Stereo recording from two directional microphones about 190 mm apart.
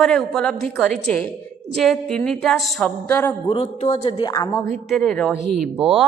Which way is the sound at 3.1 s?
10° left (ahead or behind).